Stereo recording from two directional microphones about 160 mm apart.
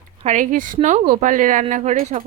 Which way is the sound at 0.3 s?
55° right (ahead or behind).